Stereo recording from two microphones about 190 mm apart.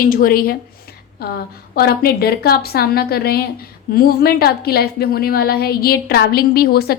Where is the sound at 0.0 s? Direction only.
50° left (ahead or behind).